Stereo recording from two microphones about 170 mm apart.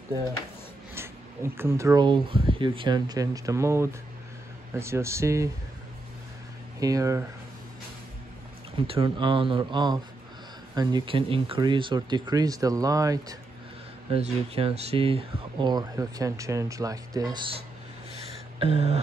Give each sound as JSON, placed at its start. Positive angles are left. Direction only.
{"t": 0.9, "sound": "speech", "side_deg": -15}
{"t": 6.8, "sound": "speech", "side_deg": -20}
{"t": 8.8, "sound": "speech", "side_deg": -35}
{"t": 14.1, "sound": "speech", "side_deg": -35}
{"t": 18.6, "sound": "a sound", "side_deg": -35}